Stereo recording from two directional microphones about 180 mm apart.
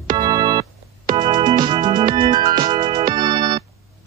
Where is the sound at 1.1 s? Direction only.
25° right (ahead or behind).